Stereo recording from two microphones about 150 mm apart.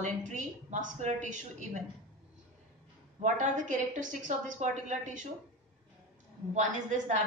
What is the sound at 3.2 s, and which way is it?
A woman's voice, 55° right (ahead or behind).